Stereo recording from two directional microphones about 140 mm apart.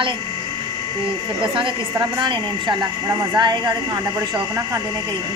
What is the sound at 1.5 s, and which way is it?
Speech, 35° right (ahead or behind).